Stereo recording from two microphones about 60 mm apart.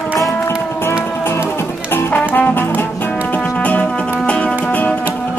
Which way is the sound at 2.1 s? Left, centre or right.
Left.